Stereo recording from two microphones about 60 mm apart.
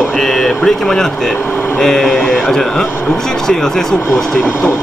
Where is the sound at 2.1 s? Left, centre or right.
Centre.